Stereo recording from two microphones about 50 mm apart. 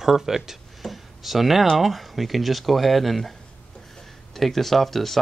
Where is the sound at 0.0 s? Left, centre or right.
Centre.